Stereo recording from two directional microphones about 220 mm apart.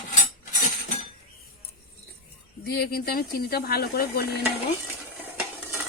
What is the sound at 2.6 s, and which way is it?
Speech, 45° left (ahead or behind).